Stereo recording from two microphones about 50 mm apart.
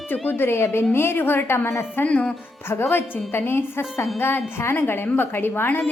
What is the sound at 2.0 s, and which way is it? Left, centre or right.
Speech, left.